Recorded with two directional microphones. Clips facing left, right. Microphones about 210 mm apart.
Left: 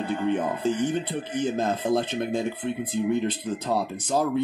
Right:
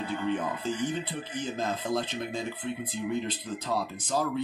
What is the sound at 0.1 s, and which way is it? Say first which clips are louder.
Speech: left 5 dB; 55° left (ahead or behind).